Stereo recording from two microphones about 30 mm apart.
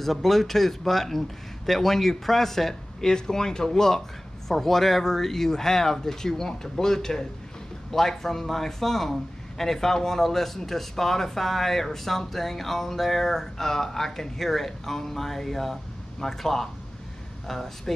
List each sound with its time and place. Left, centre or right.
0.0 s a man's voice: centre